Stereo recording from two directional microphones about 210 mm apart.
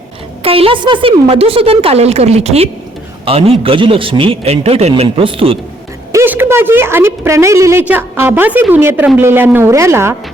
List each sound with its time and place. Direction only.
0.4 s a man's voice: 25° right (ahead or behind)
6.1 s a woman's voice: 10° right (ahead or behind)